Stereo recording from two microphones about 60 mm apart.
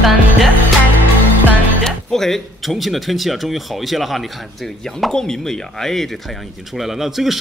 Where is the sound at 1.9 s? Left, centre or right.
Centre.